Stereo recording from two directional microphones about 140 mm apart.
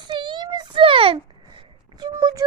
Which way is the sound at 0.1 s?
35° right (ahead or behind).